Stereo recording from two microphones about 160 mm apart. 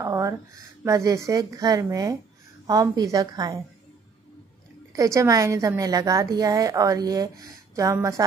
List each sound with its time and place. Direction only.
0.0 s a woman's voice: 20° right (ahead or behind)
4.9 s a woman's voice: 20° right (ahead or behind)